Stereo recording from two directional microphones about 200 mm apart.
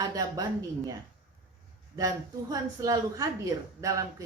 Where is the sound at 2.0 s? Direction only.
20° right (ahead or behind).